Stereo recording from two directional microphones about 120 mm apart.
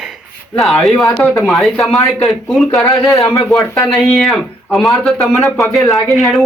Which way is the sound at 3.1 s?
25° left (ahead or behind).